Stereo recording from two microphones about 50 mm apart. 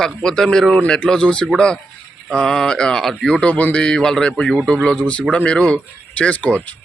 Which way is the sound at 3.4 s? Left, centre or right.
Left.